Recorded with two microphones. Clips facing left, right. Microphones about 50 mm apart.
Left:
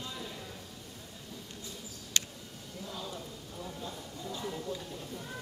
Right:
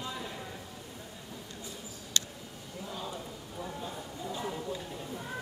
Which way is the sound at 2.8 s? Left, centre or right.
Centre.